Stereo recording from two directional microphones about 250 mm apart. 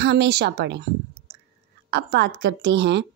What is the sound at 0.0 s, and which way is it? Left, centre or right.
Speech, right.